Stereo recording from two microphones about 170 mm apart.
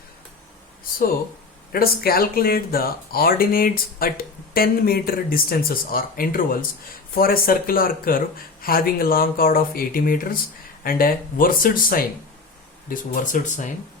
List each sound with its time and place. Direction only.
1.7 s speech: 60° left (ahead or behind)